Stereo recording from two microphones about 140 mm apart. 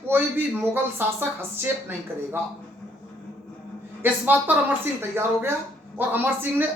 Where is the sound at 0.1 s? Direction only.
15° right (ahead or behind).